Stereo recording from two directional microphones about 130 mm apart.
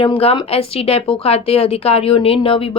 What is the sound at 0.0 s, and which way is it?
Speech, 45° left (ahead or behind).